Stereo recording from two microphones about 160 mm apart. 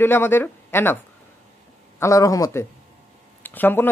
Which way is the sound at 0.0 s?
15° left (ahead or behind).